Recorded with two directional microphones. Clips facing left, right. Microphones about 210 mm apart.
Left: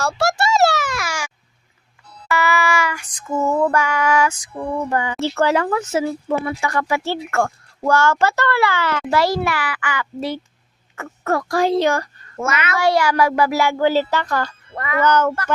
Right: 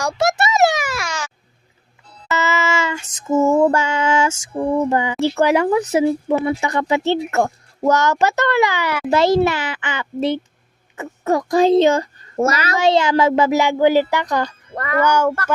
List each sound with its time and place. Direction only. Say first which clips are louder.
0.0 s a sound: right 1 dB; 20° right (ahead or behind)
0.9 s a sound: even; centre (ahead or behind)
2.2 s female singing: left 1 dB; 25° right (ahead or behind)
5.2 s speech: right 3 dB; 15° right (ahead or behind)
12.4 s a child's voice: right 5 dB; 35° right (ahead or behind)
12.7 s speech: right 1 dB; 20° right (ahead or behind)
14.7 s speech: right 3 dB; 45° right (ahead or behind)
15.0 s speech: even; 10° right (ahead or behind)